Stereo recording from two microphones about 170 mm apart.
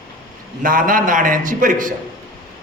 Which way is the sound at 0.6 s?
55° right (ahead or behind).